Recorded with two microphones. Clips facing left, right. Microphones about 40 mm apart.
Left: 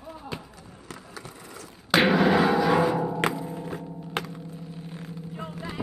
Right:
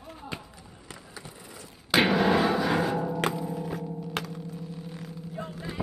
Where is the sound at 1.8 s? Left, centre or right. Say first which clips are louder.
Left 2 dB; centre.